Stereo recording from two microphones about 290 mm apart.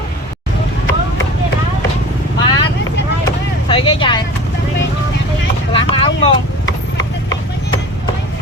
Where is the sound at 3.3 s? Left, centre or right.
Centre.